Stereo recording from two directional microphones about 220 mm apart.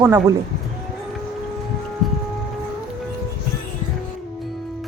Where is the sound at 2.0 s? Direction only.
Centre (ahead or behind).